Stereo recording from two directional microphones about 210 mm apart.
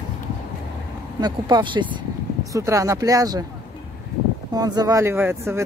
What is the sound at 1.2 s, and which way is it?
Speech, 20° right (ahead or behind).